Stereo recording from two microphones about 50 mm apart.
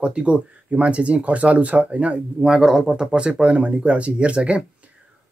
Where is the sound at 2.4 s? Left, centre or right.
Centre.